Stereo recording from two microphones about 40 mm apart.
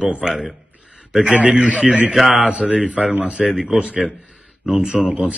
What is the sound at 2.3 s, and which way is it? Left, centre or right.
A man's voice, right.